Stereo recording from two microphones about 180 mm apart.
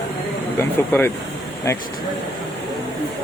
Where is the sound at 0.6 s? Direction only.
10° left (ahead or behind).